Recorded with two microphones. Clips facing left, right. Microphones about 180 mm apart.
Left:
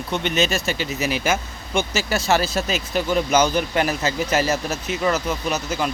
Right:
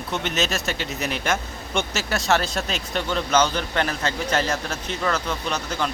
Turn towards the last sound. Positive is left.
turn(degrees=10)  # may be behind; listen again after turning